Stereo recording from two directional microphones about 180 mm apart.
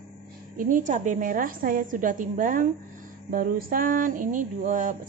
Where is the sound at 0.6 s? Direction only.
45° right (ahead or behind).